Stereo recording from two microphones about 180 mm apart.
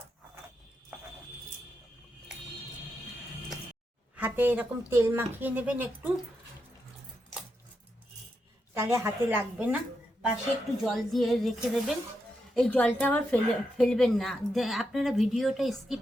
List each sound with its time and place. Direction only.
4.2 s speech: 10° right (ahead or behind)
8.7 s speech: 15° right (ahead or behind)
10.8 s speech: centre (ahead or behind)